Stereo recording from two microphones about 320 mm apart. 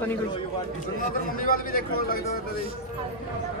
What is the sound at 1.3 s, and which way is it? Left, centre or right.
Speech, left.